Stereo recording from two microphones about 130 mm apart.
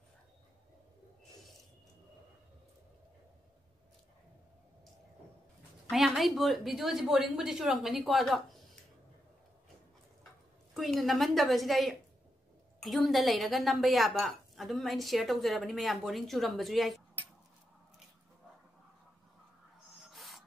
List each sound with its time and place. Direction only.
5.9 s a woman's voice: centre (ahead or behind)
10.7 s a woman's voice: centre (ahead or behind)
20.0 s owl: centre (ahead or behind)